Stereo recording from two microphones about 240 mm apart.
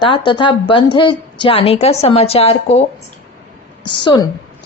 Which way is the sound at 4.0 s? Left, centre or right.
Centre.